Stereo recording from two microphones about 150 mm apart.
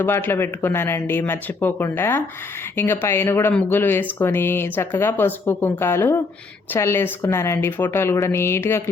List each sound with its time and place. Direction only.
0.0 s speech: 15° left (ahead or behind)